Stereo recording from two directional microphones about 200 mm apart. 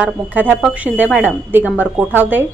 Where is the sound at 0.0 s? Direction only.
10° right (ahead or behind).